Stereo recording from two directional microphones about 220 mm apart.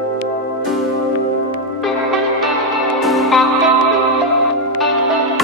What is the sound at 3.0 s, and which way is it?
Music, centre (ahead or behind).